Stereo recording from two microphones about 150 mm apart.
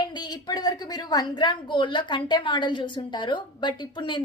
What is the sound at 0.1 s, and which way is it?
A woman's voice, 30° left (ahead or behind).